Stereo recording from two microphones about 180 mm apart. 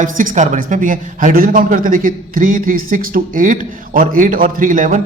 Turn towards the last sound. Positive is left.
turn(degrees=-45)  # may be behind; listen again after turning